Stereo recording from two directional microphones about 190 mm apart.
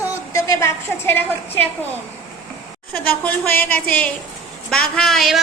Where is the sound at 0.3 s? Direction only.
15° left (ahead or behind).